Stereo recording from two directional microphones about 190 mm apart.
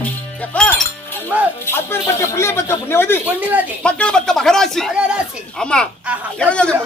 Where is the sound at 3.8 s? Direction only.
5° left (ahead or behind).